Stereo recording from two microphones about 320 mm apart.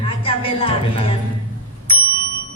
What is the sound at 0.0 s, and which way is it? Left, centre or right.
Music, centre.